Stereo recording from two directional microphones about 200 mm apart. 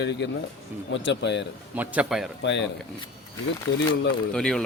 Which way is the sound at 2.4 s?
60° left (ahead or behind).